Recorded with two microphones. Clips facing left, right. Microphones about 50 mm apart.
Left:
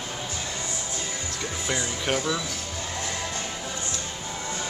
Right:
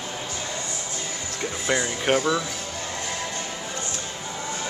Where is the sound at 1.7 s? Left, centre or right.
Right.